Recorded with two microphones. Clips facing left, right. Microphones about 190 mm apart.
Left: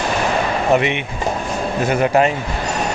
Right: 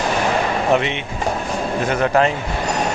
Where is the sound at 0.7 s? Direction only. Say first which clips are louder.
Left 2 dB; 10° left (ahead or behind).